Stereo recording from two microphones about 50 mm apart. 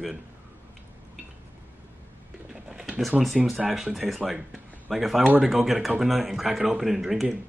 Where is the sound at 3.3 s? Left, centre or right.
Centre.